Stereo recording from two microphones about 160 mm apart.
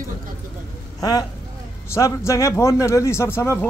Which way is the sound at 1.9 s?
20° left (ahead or behind).